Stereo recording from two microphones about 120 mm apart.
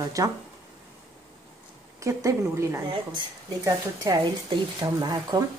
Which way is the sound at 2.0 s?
25° right (ahead or behind).